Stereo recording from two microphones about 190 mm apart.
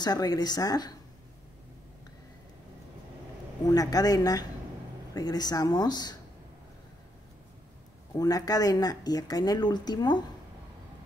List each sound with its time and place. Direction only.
0.0 s speech: 20° left (ahead or behind)
3.7 s speech: 20° left (ahead or behind)
8.2 s speech: 20° left (ahead or behind)